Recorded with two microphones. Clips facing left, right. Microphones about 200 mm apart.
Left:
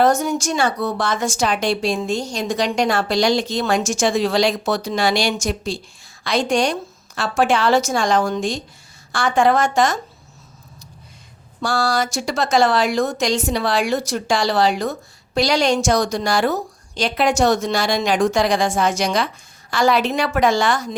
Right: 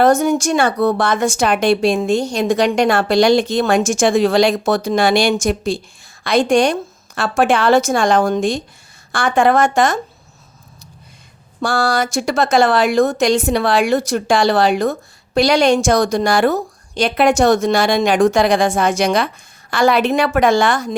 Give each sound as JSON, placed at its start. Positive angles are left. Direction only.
{"t": 0.0, "sound": "a woman's voice", "side_deg": -60}
{"t": 11.6, "sound": "a woman's voice", "side_deg": -55}